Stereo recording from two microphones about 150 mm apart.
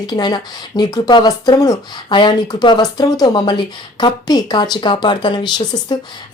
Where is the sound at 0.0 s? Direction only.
30° left (ahead or behind).